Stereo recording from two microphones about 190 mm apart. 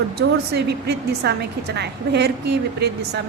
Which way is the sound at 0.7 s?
60° right (ahead or behind).